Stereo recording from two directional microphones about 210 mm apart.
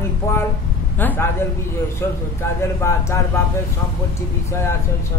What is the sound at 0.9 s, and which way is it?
A man's voice, 10° left (ahead or behind).